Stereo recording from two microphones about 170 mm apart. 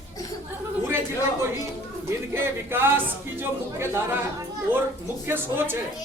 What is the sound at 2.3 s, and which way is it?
Speech, 15° right (ahead or behind).